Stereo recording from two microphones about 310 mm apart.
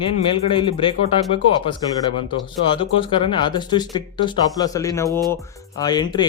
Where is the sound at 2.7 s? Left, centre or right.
Centre.